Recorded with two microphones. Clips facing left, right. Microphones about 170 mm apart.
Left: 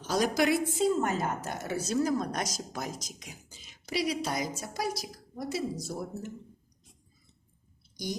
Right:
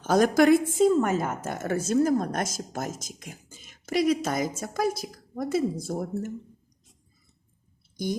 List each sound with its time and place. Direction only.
0.0 s a woman's voice: 50° right (ahead or behind)